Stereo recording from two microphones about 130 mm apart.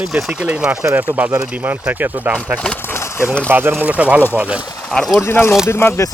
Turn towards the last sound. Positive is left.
turn(degrees=20)  # may be behind; listen again after turning